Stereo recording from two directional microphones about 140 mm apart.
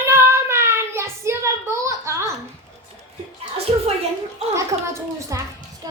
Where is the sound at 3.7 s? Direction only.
45° right (ahead or behind).